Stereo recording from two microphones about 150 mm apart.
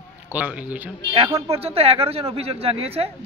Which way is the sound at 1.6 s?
40° right (ahead or behind).